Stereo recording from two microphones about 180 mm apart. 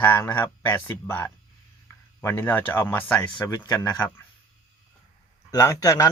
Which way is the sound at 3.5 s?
25° left (ahead or behind).